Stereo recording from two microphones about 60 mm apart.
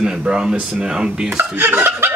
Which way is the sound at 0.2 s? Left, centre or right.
Centre.